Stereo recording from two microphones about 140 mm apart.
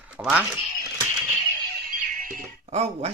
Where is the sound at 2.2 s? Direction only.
75° right (ahead or behind).